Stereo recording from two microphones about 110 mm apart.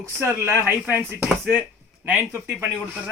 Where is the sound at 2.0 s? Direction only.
15° right (ahead or behind).